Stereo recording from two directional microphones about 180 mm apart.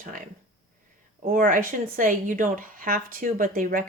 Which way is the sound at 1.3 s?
45° right (ahead or behind).